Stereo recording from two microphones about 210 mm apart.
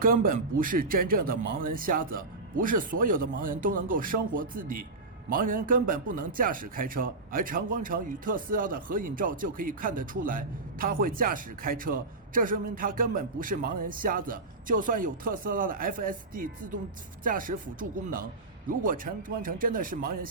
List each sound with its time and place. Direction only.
0.0 s a man's voice: 40° right (ahead or behind)